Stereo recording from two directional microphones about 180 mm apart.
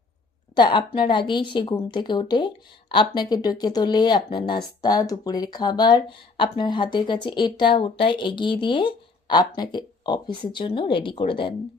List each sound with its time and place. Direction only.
0.5 s speech: 25° left (ahead or behind)